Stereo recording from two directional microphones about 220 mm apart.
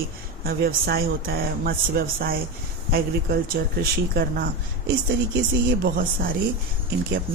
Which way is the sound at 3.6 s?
45° right (ahead or behind).